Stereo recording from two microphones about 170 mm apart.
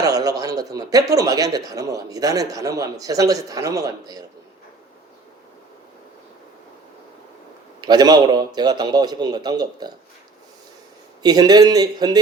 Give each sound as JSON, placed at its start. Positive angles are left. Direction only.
{"t": 0.0, "sound": "speech", "side_deg": -20}
{"t": 7.8, "sound": "speech", "side_deg": -25}
{"t": 11.2, "sound": "speech", "side_deg": -25}